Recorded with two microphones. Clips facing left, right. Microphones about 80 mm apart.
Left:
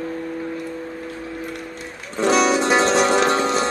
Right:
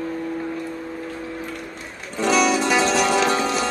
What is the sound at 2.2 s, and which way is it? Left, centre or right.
Music, left.